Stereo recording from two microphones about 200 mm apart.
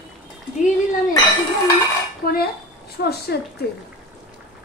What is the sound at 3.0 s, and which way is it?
Speech, 55° left (ahead or behind).